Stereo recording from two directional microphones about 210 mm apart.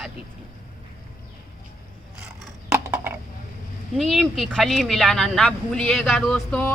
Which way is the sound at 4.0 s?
Centre (ahead or behind).